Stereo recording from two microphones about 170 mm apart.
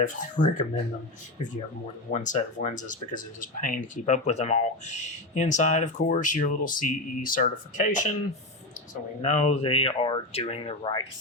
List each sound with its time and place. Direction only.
0.0 s speech: 50° left (ahead or behind)
2.1 s speech: 45° left (ahead or behind)
9.2 s speech: 45° left (ahead or behind); by 11.0 s 30° left (ahead or behind)